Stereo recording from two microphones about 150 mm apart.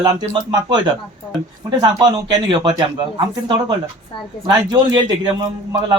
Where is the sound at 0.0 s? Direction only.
30° right (ahead or behind).